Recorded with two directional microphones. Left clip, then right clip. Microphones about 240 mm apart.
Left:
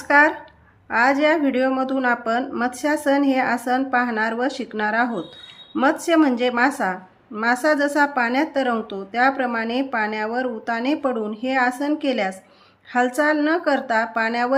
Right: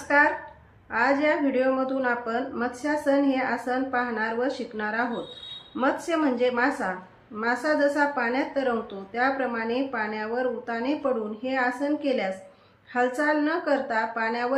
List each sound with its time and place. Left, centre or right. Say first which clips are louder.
0.1 s a woman's voice: left 5 dB; left